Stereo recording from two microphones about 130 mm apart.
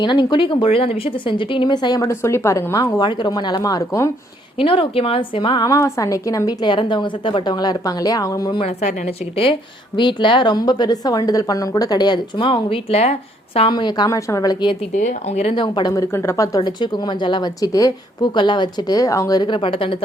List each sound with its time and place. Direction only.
0.0 s a woman's voice: 35° left (ahead or behind)
3.1 s a woman's voice: 35° left (ahead or behind)
4.5 s speech: 45° left (ahead or behind)
5.6 s a woman's voice: 25° left (ahead or behind)
8.6 s a woman's voice: 55° left (ahead or behind)
13.7 s a woman's voice: 35° left (ahead or behind)
14.9 s speech: 65° left (ahead or behind)
15.6 s a woman's voice: 35° left (ahead or behind)
16.6 s a woman's voice: 35° left (ahead or behind)